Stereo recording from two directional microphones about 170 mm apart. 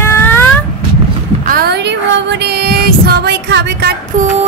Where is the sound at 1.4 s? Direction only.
60° right (ahead or behind); by 3.9 s 90° right.